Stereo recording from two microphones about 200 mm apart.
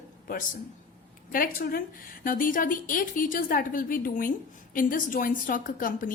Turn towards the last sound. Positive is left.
turn(degrees=45)  # may be behind; listen again after turning